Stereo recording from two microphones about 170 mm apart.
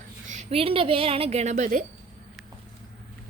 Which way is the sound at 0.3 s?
40° right (ahead or behind).